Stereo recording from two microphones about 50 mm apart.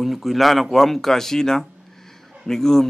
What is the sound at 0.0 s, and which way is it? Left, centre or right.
A man's voice, centre.